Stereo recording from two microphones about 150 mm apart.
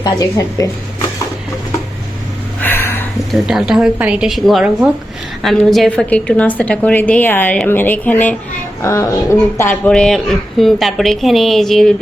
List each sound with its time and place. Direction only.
0.0 s a woman's voice: 25° left (ahead or behind)
2.6 s a sound: 15° left (ahead or behind)
3.3 s a woman's voice: 5° right (ahead or behind)